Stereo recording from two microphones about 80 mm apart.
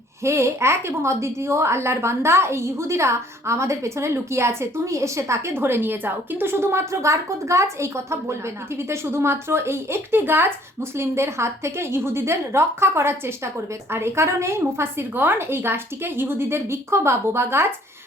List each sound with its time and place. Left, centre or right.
0.2 s a woman's voice: right